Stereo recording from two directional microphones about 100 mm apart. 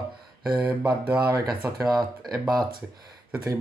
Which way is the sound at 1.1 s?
35° right (ahead or behind).